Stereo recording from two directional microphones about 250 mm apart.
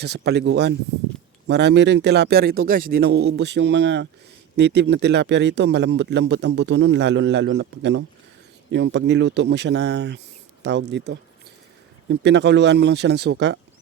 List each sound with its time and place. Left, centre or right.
0.0 s a man's voice: right